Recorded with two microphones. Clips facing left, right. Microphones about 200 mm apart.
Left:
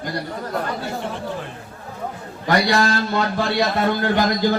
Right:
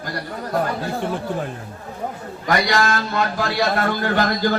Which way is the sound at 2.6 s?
30° left (ahead or behind).